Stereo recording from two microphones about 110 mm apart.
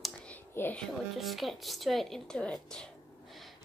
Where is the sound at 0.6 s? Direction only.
15° left (ahead or behind).